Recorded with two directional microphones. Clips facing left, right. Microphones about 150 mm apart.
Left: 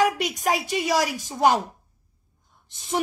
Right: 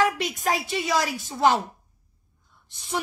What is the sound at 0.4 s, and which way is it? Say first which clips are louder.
A woman's voice: left 2 dB; 15° left (ahead or behind).